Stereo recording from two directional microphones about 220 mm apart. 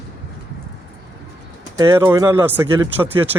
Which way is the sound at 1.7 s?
15° right (ahead or behind).